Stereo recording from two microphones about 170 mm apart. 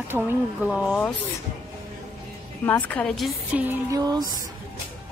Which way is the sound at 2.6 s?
10° left (ahead or behind).